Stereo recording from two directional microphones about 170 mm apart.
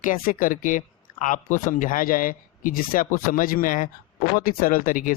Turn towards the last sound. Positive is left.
turn(degrees=55)  # may be behind; listen again after turning